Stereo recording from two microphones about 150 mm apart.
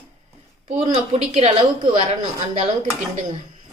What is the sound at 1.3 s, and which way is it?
A woman's voice, 40° right (ahead or behind).